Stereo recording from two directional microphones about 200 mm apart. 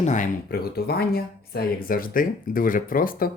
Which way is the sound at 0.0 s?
40° left (ahead or behind).